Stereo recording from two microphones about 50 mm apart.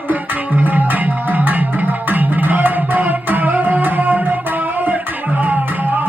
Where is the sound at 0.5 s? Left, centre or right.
Right.